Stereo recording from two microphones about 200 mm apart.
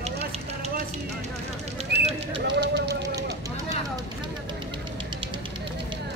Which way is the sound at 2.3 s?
60° right (ahead or behind).